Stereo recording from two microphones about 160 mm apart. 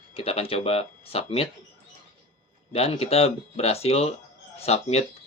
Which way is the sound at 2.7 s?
40° left (ahead or behind).